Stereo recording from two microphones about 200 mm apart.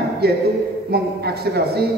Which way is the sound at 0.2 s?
50° right (ahead or behind).